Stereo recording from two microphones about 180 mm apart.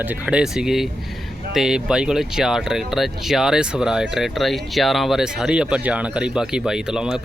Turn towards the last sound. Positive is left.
turn(degrees=-5)  # may be behind; listen again after turning